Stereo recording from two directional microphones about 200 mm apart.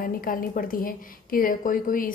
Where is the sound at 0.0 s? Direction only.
45° left (ahead or behind).